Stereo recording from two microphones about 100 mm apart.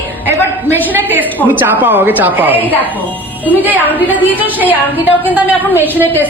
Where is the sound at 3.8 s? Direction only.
15° left (ahead or behind).